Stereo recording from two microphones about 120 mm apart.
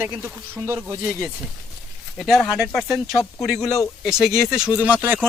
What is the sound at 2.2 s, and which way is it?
Speech, centre (ahead or behind).